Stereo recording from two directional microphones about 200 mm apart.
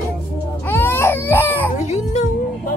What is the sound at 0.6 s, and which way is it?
Baby cry, 10° left (ahead or behind).